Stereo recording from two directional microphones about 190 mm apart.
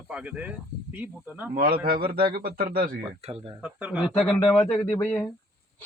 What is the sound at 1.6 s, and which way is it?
A man's voice, 50° right (ahead or behind).